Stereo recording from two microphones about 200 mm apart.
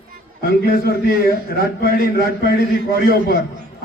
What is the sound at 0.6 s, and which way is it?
A man's voice, 50° left (ahead or behind).